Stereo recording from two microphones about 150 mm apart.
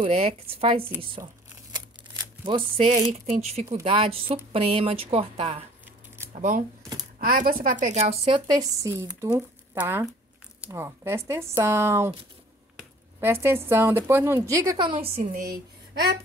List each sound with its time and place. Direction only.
0.0 s speech: 40° right (ahead or behind)
2.1 s a sound: 30° right (ahead or behind)
3.1 s speech: 45° right (ahead or behind)
6.3 s speech: 60° right (ahead or behind)
7.2 s a woman's voice: 75° right (ahead or behind); by 8.4 s 45° right (ahead or behind)
8.5 s speech: 25° right (ahead or behind)
9.2 s a woman's voice: 15° right (ahead or behind)
13.2 s a woman's voice: 15° right (ahead or behind); by 15.2 s 35° right (ahead or behind)
15.3 s a woman's voice: 85° right